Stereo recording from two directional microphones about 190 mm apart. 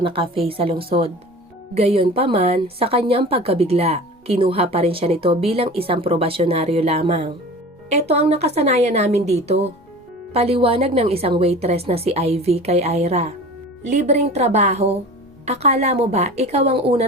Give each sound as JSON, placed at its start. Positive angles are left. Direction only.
{"t": 0.0, "sound": "a woman's voice", "side_deg": -30}